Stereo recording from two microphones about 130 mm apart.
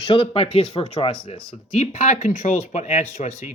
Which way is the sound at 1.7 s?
60° left (ahead or behind).